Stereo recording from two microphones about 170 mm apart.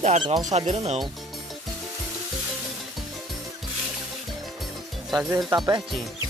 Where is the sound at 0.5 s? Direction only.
40° right (ahead or behind).